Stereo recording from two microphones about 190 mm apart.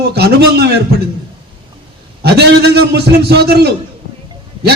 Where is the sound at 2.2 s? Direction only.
60° right (ahead or behind).